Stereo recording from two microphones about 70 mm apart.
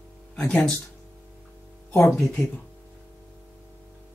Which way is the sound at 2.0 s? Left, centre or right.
Centre.